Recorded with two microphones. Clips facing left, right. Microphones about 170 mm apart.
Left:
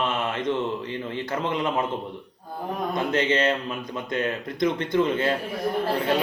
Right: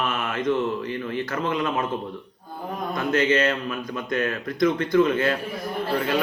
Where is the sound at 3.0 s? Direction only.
25° left (ahead or behind).